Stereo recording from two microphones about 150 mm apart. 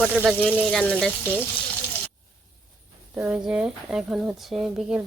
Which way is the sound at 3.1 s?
10° right (ahead or behind).